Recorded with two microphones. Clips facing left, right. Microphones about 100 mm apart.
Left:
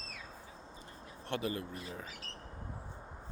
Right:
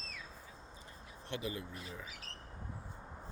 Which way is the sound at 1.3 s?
55° left (ahead or behind).